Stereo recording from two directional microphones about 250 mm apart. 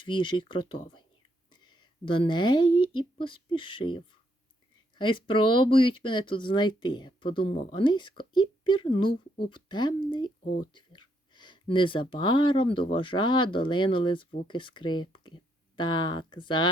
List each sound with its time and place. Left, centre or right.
0.0 s speech: centre